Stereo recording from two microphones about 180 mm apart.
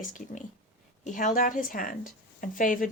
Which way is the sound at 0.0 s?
45° left (ahead or behind).